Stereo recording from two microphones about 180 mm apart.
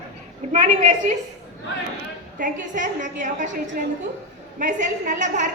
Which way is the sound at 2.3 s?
45° right (ahead or behind).